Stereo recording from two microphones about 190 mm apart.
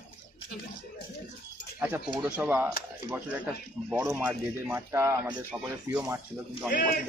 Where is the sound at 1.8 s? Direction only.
5° right (ahead or behind).